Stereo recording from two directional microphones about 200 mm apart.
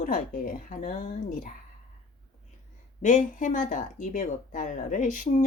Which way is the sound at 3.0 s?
40° left (ahead or behind).